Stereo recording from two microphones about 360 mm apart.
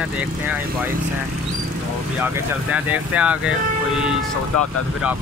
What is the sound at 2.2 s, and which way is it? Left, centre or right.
Speech, centre.